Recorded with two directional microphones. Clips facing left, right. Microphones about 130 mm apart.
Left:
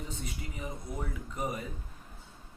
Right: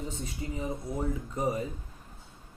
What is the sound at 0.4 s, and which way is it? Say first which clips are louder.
Speech: right 8 dB; 25° right (ahead or behind).